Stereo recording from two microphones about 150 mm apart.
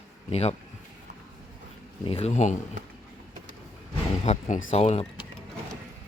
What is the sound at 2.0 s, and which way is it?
Speech, 45° left (ahead or behind).